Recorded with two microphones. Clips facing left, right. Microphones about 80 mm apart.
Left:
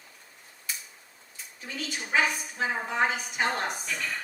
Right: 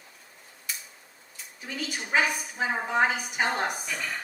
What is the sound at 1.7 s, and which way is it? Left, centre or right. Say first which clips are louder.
A woman's voice: right 1 dB; centre.